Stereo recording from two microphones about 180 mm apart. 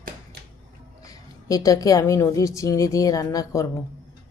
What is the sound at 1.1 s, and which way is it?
Speech, 20° left (ahead or behind).